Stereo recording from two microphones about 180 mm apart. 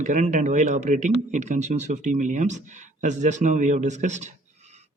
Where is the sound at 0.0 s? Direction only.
40° right (ahead or behind).